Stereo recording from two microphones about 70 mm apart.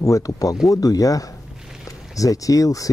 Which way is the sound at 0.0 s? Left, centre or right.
Left.